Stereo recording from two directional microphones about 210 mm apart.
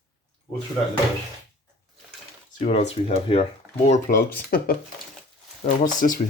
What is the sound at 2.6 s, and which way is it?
Speech, 30° left (ahead or behind).